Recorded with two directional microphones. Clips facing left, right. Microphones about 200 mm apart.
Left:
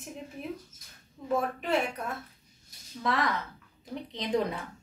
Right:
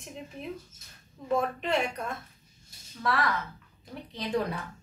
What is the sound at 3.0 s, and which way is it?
A woman's voice, 20° left (ahead or behind).